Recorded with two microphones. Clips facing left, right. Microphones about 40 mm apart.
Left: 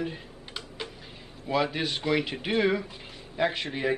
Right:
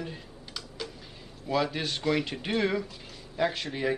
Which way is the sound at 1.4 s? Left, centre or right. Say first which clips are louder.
Left 1 dB; centre.